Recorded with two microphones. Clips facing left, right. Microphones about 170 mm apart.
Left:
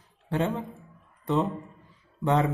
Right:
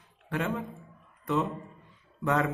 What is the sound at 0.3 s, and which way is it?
A man's voice, 30° left (ahead or behind).